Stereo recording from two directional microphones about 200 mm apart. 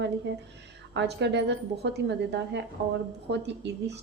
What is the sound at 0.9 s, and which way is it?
A woman's voice, 60° right (ahead or behind).